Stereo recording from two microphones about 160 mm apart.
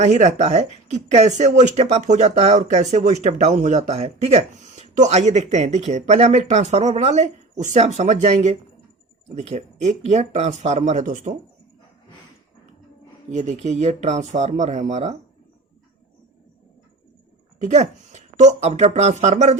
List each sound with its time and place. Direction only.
0.0 s speech: 45° right (ahead or behind)
13.3 s speech: 45° right (ahead or behind)
17.6 s speech: 45° right (ahead or behind)